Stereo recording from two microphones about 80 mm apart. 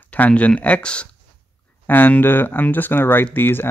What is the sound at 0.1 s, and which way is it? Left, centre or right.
Speech, centre.